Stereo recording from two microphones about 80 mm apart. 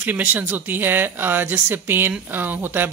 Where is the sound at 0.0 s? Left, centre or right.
Right.